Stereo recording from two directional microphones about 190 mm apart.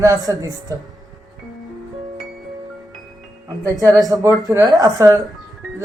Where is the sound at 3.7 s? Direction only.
15° right (ahead or behind).